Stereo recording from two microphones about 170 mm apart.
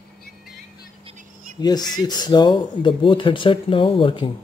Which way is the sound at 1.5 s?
25° left (ahead or behind).